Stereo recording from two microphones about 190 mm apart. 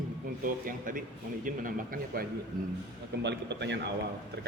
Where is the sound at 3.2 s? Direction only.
65° right (ahead or behind).